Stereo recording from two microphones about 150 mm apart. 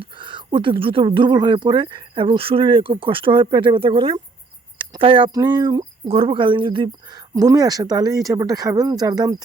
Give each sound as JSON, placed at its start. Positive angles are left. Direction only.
{"t": 0.0, "sound": "speech", "side_deg": -35}